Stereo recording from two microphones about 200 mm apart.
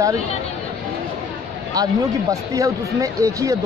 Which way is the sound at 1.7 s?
20° right (ahead or behind).